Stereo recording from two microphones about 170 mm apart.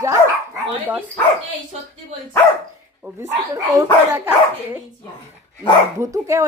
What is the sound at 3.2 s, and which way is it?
Speech, 15° right (ahead or behind).